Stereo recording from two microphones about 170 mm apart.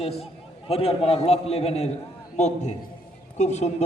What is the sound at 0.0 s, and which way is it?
A man's voice, 35° left (ahead or behind).